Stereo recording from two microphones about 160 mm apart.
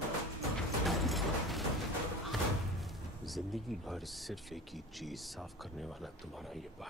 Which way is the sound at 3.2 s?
Centre (ahead or behind).